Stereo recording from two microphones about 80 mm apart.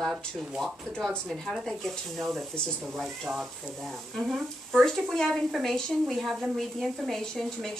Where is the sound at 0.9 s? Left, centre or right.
Centre.